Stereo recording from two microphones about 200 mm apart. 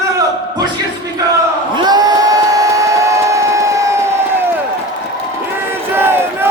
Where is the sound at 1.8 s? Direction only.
20° right (ahead or behind).